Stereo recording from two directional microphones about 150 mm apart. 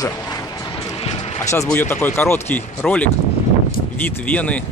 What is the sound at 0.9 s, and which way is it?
Basketball bounce, 40° left (ahead or behind).